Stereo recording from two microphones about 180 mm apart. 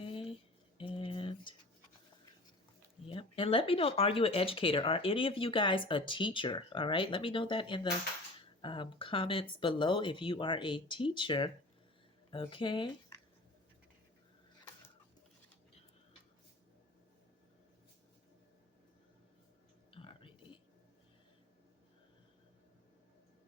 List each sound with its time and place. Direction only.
0.0 s a sound: 30° left (ahead or behind)
3.1 s speech: 30° left (ahead or behind)
19.9 s whispering: 30° left (ahead or behind)